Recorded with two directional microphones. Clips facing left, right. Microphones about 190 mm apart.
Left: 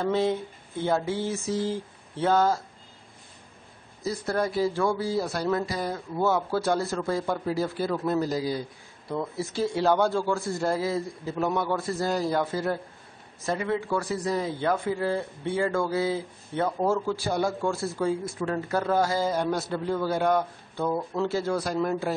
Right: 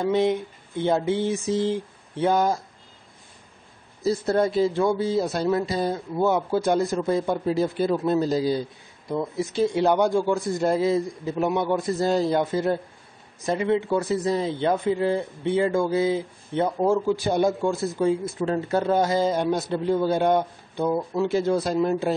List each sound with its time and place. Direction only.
0.0 s a sound: 15° right (ahead or behind)
4.0 s speech: 25° right (ahead or behind)
9.1 s speech: 15° right (ahead or behind)